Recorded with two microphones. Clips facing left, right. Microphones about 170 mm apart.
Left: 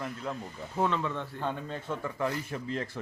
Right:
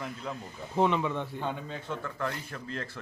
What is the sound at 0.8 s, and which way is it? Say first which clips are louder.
Speech: right 3 dB; 15° right (ahead or behind).